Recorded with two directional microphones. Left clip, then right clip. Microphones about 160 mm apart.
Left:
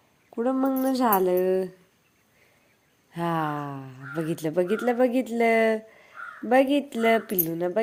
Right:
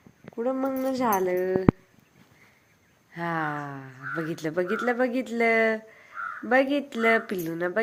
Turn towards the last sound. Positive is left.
turn(degrees=25)  # may be behind; listen again after turning